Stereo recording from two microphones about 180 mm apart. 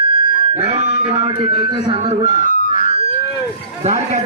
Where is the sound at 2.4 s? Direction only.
45° left (ahead or behind).